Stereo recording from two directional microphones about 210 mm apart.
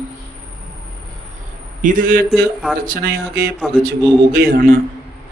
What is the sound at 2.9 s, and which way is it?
Speech, 45° right (ahead or behind).